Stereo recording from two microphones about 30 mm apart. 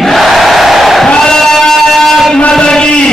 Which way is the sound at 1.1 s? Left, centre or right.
Left.